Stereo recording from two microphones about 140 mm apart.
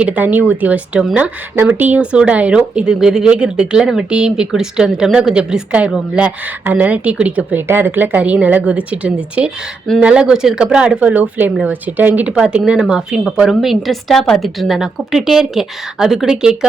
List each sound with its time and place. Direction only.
0.0 s speech: 10° right (ahead or behind)